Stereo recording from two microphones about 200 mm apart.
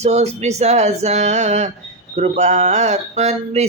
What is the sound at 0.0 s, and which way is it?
Speech, 35° right (ahead or behind).